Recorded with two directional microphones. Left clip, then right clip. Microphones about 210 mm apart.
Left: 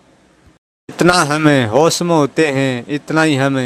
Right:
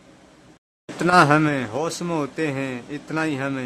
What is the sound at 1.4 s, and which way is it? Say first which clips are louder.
Speech: left 12 dB; 35° left (ahead or behind).